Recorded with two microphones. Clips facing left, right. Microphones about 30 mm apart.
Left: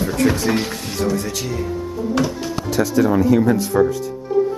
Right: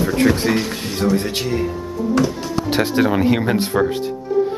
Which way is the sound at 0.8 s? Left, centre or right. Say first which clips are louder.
Right 2 dB; right.